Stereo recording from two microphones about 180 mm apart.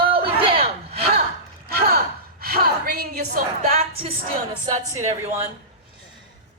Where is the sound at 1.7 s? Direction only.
55° right (ahead or behind).